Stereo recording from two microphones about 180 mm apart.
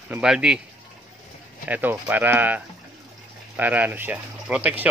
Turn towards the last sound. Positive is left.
turn(degrees=-10)  # may be behind; listen again after turning